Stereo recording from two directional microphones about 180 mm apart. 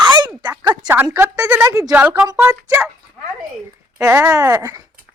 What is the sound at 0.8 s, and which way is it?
A woman's voice, 15° right (ahead or behind).